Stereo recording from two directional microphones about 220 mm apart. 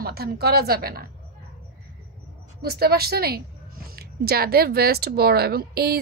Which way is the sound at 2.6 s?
45° right (ahead or behind).